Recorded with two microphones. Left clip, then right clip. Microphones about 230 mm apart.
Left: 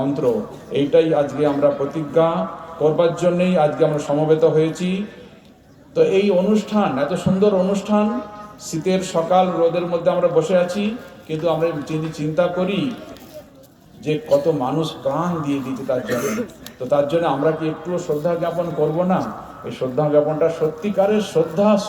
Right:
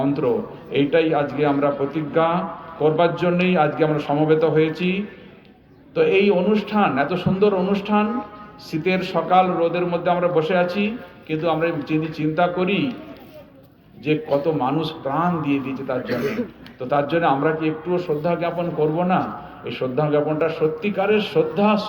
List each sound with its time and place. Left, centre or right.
0.0 s a man's voice: right
14.1 s a man's voice: right